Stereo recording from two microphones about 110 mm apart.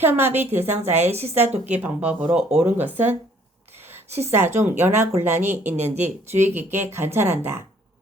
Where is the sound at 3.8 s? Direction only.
20° right (ahead or behind).